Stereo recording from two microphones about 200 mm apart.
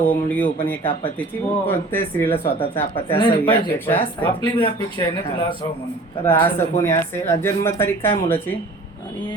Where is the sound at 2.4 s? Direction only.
30° left (ahead or behind).